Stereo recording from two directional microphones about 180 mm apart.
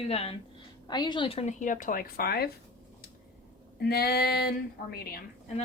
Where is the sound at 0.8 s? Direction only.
25° left (ahead or behind); by 2.5 s 60° left (ahead or behind).